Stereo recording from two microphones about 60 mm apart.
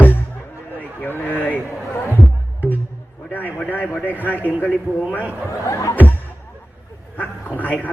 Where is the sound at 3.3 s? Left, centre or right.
Left.